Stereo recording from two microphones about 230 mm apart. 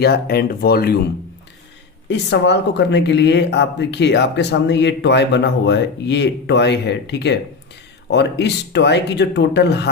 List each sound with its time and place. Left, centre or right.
0.0 s speech: left
2.0 s speech: left